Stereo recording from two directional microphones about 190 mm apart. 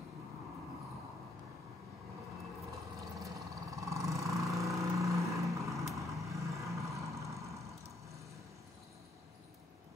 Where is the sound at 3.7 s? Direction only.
15° right (ahead or behind).